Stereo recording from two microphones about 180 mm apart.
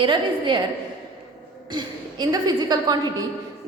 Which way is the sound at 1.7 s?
20° right (ahead or behind).